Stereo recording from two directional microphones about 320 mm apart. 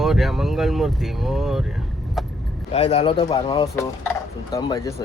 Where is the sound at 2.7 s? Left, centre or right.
Centre.